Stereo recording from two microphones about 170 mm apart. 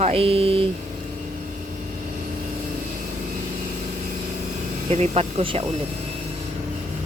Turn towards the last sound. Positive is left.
turn(degrees=-35)  # may be behind; listen again after turning